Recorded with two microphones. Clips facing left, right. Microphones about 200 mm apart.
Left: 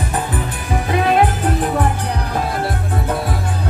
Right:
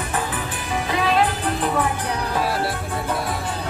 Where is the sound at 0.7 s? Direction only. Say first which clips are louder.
Left 5 dB; 55° left (ahead or behind).